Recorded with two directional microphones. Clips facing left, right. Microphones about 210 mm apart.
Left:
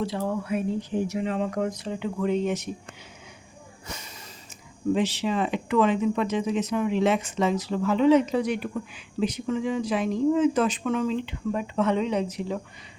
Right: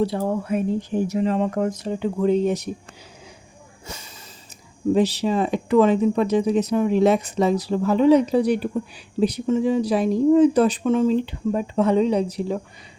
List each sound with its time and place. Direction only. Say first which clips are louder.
0.0 s speech: right 5 dB; 40° right (ahead or behind)
4.9 s speech: right 7 dB; 35° right (ahead or behind)